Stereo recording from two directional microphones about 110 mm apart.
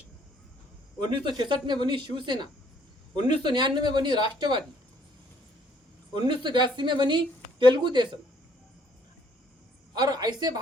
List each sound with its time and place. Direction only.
0.9 s speech: 45° right (ahead or behind)
6.1 s speech: 45° right (ahead or behind)
9.9 s speech: 35° right (ahead or behind)